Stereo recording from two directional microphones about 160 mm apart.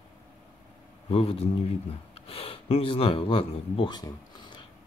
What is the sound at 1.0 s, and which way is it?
Speech, 35° left (ahead or behind).